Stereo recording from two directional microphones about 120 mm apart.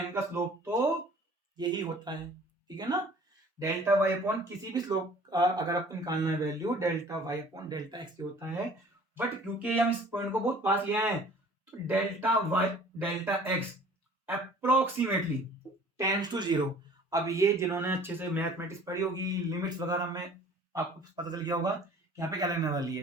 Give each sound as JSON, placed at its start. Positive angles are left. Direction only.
{"t": 0.1, "sound": "speech", "side_deg": -20}
{"t": 1.5, "sound": "speech", "side_deg": -35}
{"t": 3.6, "sound": "speech", "side_deg": -20}
{"t": 4.7, "sound": "speech", "side_deg": -30}
{"t": 9.1, "sound": "speech", "side_deg": -15}
{"t": 16.0, "sound": "speech", "side_deg": -35}
{"t": 17.1, "sound": "speech", "side_deg": -25}
{"t": 18.9, "sound": "speech", "side_deg": -30}